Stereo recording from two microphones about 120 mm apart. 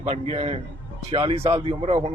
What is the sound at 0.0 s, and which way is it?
Speech, 50° right (ahead or behind).